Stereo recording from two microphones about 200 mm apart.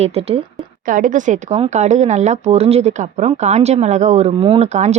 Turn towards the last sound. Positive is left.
turn(degrees=-35)  # may be behind; listen again after turning